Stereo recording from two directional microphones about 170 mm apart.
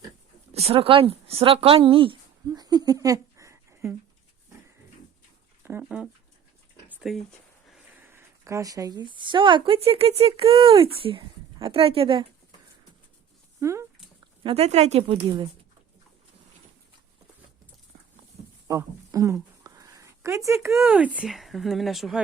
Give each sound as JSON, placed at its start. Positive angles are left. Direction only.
{"t": 0.5, "sound": "speech", "side_deg": -35}
{"t": 2.5, "sound": "a sound", "side_deg": -25}
{"t": 5.6, "sound": "speech", "side_deg": -10}
{"t": 6.8, "sound": "a sound", "side_deg": 0}
{"t": 8.0, "sound": "speech", "side_deg": -15}
{"t": 13.6, "sound": "speech", "side_deg": -15}
{"t": 14.4, "sound": "speech", "side_deg": -35}
{"t": 18.7, "sound": "a sound", "side_deg": -15}
{"t": 20.7, "sound": "speech", "side_deg": -10}